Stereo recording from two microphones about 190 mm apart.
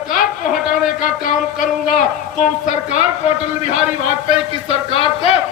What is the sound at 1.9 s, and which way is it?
A man's voice, 45° left (ahead or behind).